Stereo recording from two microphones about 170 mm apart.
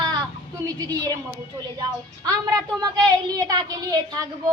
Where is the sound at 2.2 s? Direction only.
20° right (ahead or behind).